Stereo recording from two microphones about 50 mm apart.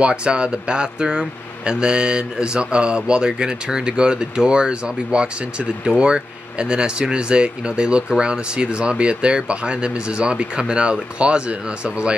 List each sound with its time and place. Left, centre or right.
0.0 s speech: centre